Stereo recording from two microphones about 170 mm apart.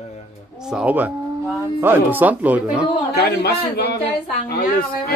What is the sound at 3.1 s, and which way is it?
A man's voice, 70° left (ahead or behind).